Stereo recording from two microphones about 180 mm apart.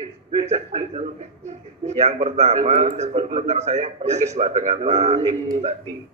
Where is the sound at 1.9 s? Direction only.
40° right (ahead or behind).